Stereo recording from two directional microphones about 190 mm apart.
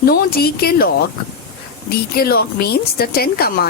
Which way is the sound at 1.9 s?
50° left (ahead or behind).